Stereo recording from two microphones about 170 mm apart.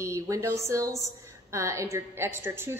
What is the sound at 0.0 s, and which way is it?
A woman's voice, 15° right (ahead or behind).